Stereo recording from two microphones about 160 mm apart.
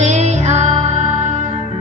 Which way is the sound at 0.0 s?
45° right (ahead or behind).